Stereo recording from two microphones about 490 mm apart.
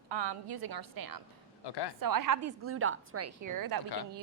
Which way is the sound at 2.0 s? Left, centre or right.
Right.